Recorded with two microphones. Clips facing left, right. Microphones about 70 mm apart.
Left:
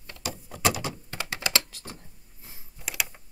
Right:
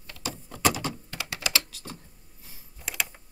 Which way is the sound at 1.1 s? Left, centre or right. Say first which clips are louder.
Left 3 dB; left.